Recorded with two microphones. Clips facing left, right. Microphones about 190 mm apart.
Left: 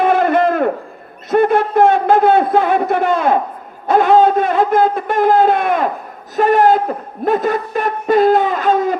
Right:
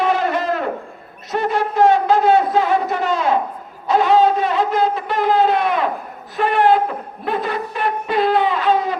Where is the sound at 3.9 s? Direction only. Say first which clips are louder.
Left 3 dB; 50° left (ahead or behind).